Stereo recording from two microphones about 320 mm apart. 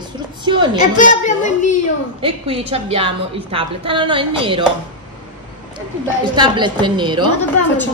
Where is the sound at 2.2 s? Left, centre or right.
Centre.